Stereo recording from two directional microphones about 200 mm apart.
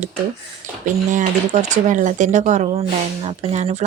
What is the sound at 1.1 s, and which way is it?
Speech, 40° right (ahead or behind).